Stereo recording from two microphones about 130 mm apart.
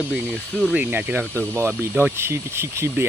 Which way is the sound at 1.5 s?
20° right (ahead or behind).